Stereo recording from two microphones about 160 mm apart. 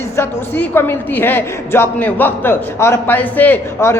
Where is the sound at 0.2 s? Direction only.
15° left (ahead or behind).